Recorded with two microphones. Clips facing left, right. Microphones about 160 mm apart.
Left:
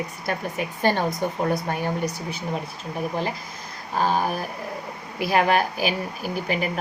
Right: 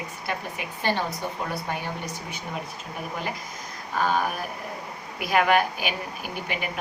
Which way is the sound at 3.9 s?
35° left (ahead or behind).